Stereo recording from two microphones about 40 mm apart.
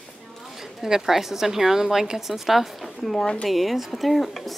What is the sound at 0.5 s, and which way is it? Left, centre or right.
A woman's voice, centre.